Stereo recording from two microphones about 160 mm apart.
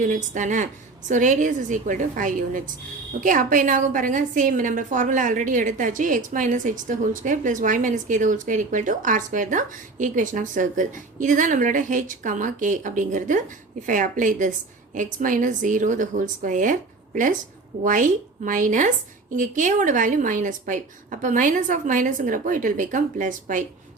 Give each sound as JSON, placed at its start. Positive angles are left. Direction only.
{"t": 0.0, "sound": "a woman's voice", "side_deg": -50}
{"t": 17.8, "sound": "a woman's voice", "side_deg": -55}